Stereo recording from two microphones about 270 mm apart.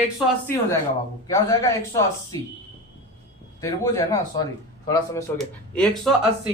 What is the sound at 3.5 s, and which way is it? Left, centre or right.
Speech, centre.